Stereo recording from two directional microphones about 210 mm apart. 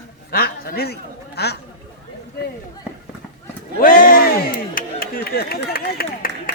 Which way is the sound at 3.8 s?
40° left (ahead or behind).